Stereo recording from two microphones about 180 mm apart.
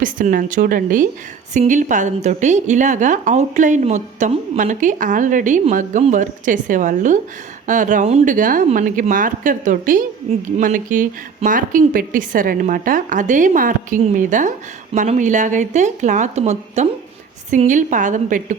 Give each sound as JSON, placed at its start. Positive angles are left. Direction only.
{"t": 0.0, "sound": "a woman's voice", "side_deg": -50}